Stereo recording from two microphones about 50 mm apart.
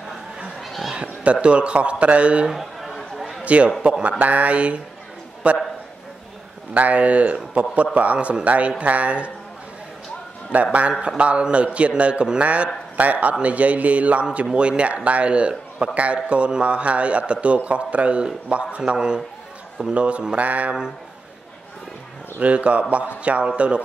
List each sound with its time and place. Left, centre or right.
0.6 s a sound: centre
0.9 s a man's voice: right
2.5 s chatter: centre
3.4 s a man's voice: right
6.7 s a man's voice: right
10.5 s a man's voice: right
22.4 s a man's voice: right